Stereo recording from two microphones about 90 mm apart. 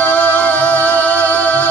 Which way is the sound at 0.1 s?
15° left (ahead or behind).